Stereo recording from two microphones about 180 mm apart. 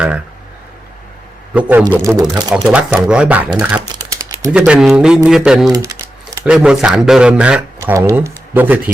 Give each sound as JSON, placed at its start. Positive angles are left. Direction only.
{"t": 1.5, "sound": "speech", "side_deg": -5}
{"t": 1.9, "sound": "speech", "side_deg": -20}
{"t": 2.6, "sound": "speech", "side_deg": -10}
{"t": 3.8, "sound": "typing", "side_deg": -20}
{"t": 4.5, "sound": "speech", "side_deg": -5}
{"t": 5.7, "sound": "typing", "side_deg": -20}
{"t": 6.4, "sound": "speech", "side_deg": -5}
{"t": 7.8, "sound": "speech", "side_deg": -15}